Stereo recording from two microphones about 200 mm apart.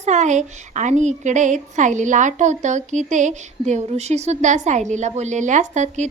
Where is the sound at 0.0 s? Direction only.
35° right (ahead or behind).